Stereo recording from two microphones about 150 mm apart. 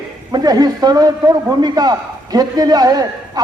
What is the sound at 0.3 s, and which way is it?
A man's voice, 25° right (ahead or behind).